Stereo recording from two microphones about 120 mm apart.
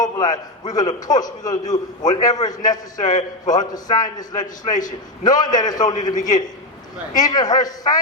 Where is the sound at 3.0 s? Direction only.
90° left.